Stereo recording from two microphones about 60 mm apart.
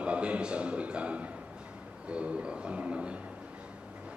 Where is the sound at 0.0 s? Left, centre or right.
Centre.